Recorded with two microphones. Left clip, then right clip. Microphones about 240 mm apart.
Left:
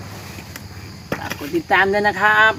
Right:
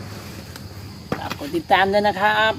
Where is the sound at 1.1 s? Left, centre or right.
Centre.